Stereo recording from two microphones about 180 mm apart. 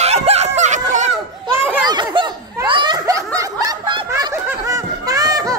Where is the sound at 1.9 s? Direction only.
25° right (ahead or behind).